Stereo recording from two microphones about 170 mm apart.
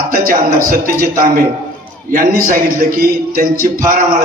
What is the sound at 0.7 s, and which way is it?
A man's voice, 55° right (ahead or behind).